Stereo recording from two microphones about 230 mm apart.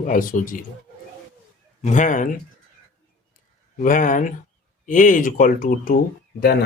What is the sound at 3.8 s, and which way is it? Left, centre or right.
Speech, left.